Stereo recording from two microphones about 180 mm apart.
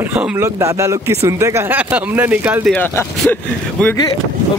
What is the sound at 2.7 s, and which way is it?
Speech, 10° left (ahead or behind).